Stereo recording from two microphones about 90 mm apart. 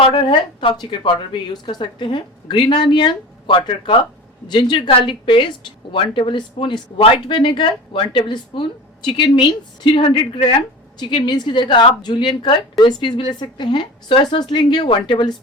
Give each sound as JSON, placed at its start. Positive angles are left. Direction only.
{"t": 0.1, "sound": "a woman's voice", "side_deg": 65}
{"t": 4.4, "sound": "speech", "side_deg": 60}
{"t": 11.0, "sound": "a woman's voice", "side_deg": 55}